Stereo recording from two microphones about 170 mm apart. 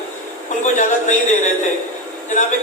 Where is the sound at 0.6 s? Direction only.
45° left (ahead or behind).